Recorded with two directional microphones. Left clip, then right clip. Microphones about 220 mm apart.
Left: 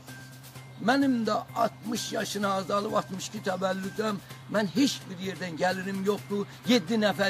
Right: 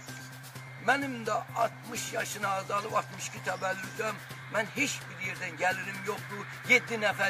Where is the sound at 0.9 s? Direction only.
Centre (ahead or behind).